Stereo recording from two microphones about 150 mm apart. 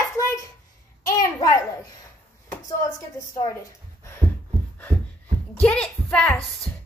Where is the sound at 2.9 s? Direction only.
20° left (ahead or behind).